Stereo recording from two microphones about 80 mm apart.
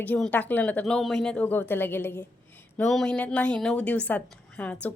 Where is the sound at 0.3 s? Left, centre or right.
Left.